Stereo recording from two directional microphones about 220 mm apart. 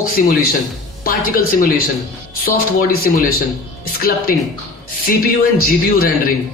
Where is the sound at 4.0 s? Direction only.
40° left (ahead or behind).